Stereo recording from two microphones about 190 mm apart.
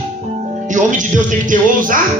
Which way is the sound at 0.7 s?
40° right (ahead or behind).